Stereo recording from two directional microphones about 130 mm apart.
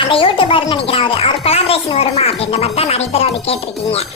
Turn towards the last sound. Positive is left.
turn(degrees=50)  # may be behind; listen again after turning